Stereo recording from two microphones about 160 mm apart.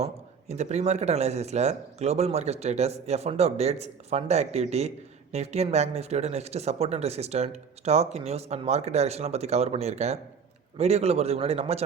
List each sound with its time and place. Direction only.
0.0 s speech: 45° right (ahead or behind)